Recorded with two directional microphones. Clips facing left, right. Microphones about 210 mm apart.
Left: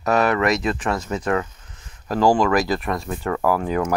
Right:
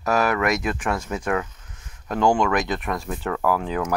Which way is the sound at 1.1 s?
10° right (ahead or behind).